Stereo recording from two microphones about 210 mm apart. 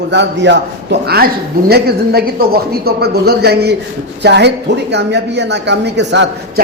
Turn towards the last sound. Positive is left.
turn(degrees=-55)  # may be behind; listen again after turning